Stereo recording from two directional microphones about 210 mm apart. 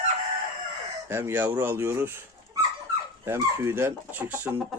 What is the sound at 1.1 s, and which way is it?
Speech, 10° right (ahead or behind).